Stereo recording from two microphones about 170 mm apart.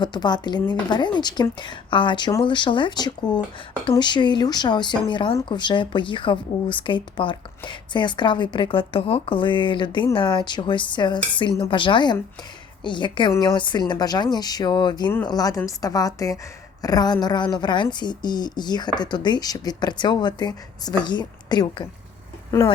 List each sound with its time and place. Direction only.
0.0 s speech: 25° left (ahead or behind)